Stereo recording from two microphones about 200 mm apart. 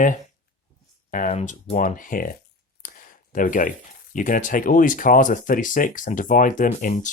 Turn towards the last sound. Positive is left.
turn(degrees=40)  # may be behind; listen again after turning